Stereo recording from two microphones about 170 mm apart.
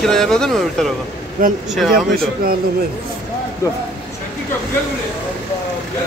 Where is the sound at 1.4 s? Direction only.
55° right (ahead or behind).